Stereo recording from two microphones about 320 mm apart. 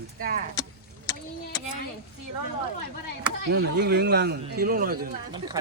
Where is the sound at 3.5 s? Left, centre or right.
Right.